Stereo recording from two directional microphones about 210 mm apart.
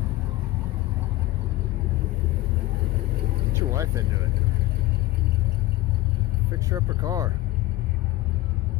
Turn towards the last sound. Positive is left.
turn(degrees=-15)  # may be behind; listen again after turning